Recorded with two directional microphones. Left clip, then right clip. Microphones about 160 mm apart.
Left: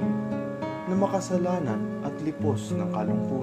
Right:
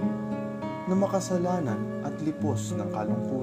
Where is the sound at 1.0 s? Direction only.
40° right (ahead or behind).